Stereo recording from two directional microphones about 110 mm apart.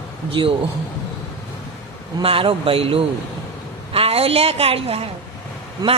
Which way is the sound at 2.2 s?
55° right (ahead or behind).